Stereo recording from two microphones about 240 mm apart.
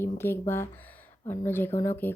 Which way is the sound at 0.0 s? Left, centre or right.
Centre.